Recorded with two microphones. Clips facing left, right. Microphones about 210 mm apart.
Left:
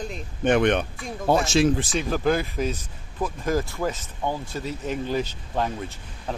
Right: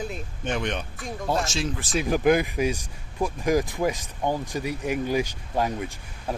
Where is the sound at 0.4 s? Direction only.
60° left (ahead or behind).